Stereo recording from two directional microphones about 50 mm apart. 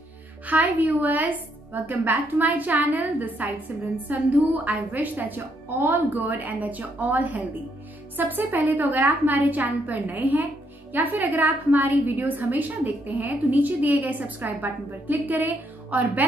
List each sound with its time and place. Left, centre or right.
0.5 s a woman's voice: right